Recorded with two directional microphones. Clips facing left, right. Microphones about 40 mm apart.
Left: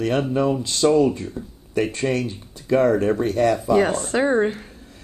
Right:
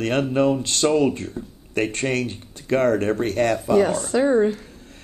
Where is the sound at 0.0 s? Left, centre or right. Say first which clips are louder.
Right 1 dB; right.